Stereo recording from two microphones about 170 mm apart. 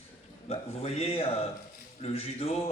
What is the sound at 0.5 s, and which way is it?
A man's voice, 40° left (ahead or behind).